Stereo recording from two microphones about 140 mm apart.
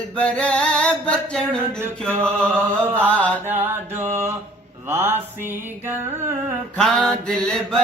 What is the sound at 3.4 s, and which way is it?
Mantra, 15° right (ahead or behind).